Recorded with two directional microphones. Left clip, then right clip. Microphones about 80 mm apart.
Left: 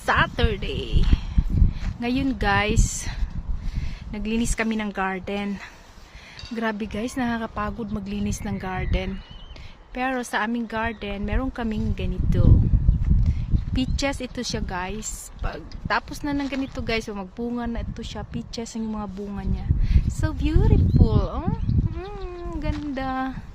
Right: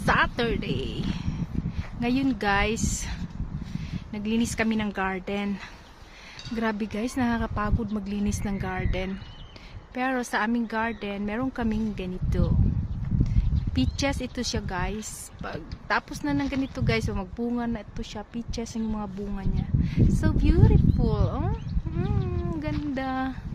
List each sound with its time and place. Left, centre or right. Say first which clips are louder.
0.0 s a sound: left 2 dB; left
2.0 s a woman's voice: left 1 dB; left
4.1 s speech: left 1 dB; left
6.5 s a woman's voice: left 2 dB; left
13.7 s a woman's voice: left 1 dB; left
17.6 s speech: left 1 dB; left
17.9 s speech: left 2 dB; left